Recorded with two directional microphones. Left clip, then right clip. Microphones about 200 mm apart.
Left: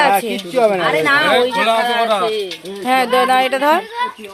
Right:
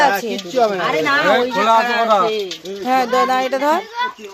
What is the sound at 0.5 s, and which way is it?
Speech, 35° left (ahead or behind).